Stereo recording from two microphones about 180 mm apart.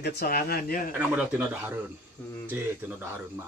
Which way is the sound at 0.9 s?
10° right (ahead or behind).